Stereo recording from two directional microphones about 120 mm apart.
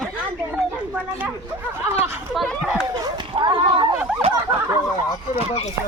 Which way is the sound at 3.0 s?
40° right (ahead or behind).